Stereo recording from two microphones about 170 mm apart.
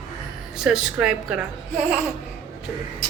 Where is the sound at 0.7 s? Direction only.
5° right (ahead or behind).